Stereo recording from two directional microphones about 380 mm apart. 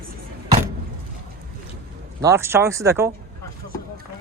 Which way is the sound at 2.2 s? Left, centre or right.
Centre.